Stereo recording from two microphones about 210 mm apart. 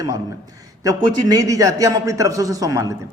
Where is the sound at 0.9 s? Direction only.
20° right (ahead or behind).